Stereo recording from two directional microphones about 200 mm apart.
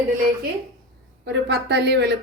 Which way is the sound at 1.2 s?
60° right (ahead or behind).